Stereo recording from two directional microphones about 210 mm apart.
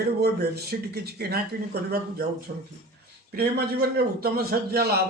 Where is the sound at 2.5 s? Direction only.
35° right (ahead or behind).